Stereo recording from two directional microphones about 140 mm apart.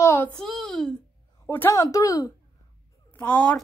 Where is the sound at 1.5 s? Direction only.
15° left (ahead or behind).